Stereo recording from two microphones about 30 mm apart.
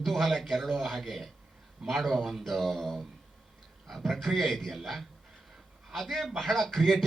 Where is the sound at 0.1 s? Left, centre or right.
Centre.